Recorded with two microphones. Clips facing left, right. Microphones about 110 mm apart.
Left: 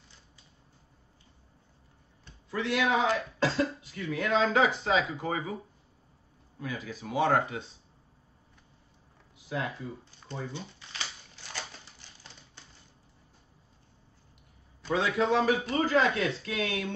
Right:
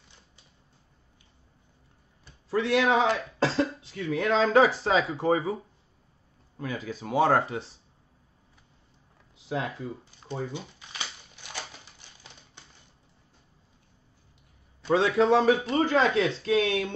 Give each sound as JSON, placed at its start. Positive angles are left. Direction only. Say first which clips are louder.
{"t": 2.6, "sound": "speech", "louder": "right 3 dB", "side_deg": -35}
{"t": 6.6, "sound": "speech", "louder": "right 4 dB", "side_deg": -40}
{"t": 9.5, "sound": "speech", "louder": "right 3 dB", "side_deg": -30}
{"t": 10.5, "sound": "typewriter", "louder": "right 3 dB", "side_deg": -15}
{"t": 15.0, "sound": "speech", "louder": "right 5 dB", "side_deg": -30}